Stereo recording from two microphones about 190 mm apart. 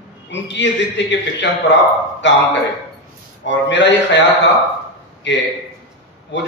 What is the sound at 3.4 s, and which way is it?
A man's voice, 70° left (ahead or behind).